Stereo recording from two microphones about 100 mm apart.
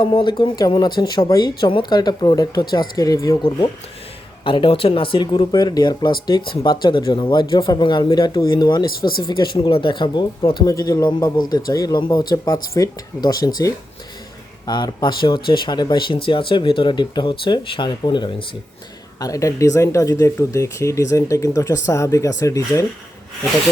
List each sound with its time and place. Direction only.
0.0 s speech: 55° left (ahead or behind); by 3.3 s 35° left (ahead or behind)
4.4 s speech: 60° left (ahead or behind)
10.7 s speech: 35° left (ahead or behind); by 18.4 s 50° left (ahead or behind)
19.2 s speech: 35° left (ahead or behind)